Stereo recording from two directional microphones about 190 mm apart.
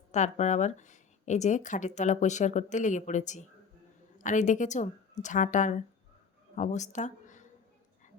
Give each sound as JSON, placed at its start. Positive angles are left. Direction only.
{"t": 0.1, "sound": "speech", "side_deg": 40}